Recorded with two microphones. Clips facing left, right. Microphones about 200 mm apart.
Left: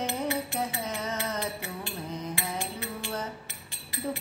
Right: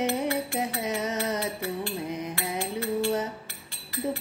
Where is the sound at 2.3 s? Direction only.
15° left (ahead or behind).